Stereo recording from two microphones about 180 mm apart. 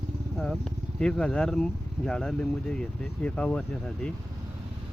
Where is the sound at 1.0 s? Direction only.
5° left (ahead or behind).